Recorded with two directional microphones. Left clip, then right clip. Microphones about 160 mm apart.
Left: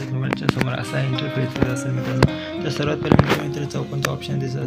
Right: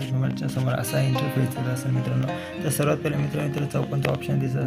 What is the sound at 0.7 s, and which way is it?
Speech, 5° right (ahead or behind).